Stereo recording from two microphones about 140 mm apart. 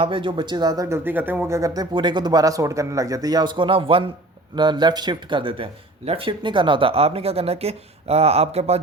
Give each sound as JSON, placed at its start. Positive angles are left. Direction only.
{"t": 0.0, "sound": "speech", "side_deg": -40}